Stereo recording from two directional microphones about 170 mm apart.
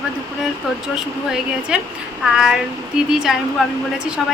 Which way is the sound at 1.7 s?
5° right (ahead or behind).